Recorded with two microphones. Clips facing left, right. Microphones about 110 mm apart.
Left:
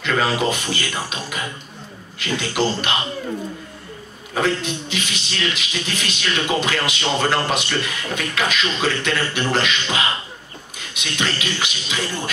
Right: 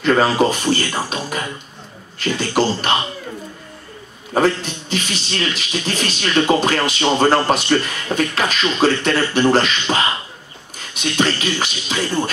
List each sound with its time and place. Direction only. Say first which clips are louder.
0.0 s a man's voice: right 5 dB; 40° right (ahead or behind)
4.3 s a man's voice: right 4 dB; 35° right (ahead or behind)